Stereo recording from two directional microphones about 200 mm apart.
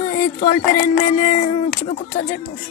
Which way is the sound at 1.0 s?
40° left (ahead or behind).